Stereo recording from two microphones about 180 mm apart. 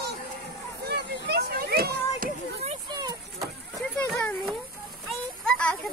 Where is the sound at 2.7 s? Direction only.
25° right (ahead or behind).